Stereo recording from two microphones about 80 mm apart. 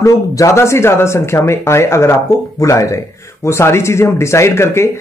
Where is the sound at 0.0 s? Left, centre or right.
Left.